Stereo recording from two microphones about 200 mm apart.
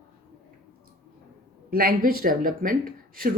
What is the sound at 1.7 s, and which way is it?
Speech, 45° right (ahead or behind).